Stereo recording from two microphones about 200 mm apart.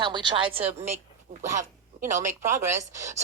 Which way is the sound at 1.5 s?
40° right (ahead or behind).